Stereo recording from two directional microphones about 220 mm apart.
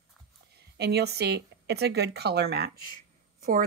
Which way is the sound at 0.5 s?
45° right (ahead or behind).